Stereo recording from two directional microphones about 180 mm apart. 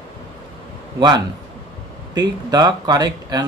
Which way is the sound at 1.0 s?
25° right (ahead or behind).